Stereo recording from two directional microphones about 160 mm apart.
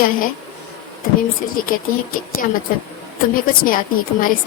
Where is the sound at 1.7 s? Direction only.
60° left (ahead or behind).